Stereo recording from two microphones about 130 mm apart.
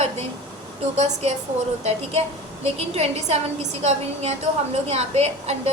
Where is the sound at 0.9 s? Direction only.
55° right (ahead or behind).